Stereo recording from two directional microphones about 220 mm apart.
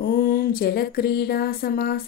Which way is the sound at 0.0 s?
40° left (ahead or behind).